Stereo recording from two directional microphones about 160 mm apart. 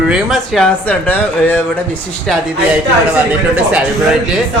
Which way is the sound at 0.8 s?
10° left (ahead or behind).